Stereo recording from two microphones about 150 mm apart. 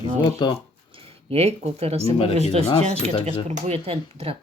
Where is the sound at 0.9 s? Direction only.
35° right (ahead or behind).